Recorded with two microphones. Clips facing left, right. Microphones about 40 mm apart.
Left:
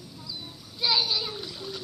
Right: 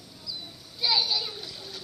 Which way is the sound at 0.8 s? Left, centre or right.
Centre.